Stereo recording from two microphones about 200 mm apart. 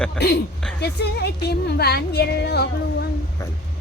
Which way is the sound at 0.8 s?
55° left (ahead or behind).